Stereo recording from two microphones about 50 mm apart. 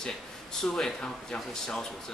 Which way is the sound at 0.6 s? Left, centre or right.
Centre.